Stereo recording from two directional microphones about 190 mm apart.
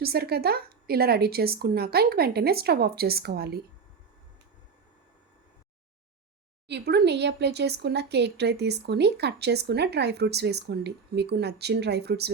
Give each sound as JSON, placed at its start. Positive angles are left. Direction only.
{"t": 0.0, "sound": "speech", "side_deg": -55}
{"t": 6.7, "sound": "speech", "side_deg": -60}